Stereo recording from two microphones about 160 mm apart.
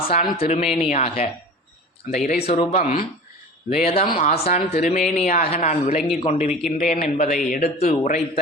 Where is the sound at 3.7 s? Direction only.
35° left (ahead or behind).